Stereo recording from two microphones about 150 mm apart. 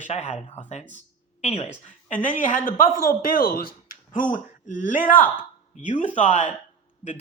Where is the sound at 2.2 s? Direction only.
60° left (ahead or behind).